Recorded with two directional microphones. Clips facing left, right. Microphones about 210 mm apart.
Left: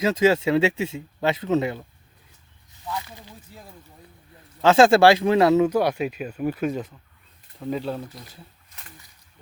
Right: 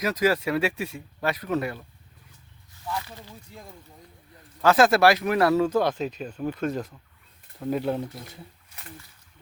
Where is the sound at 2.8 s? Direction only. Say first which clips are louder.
Even; 20° left (ahead or behind).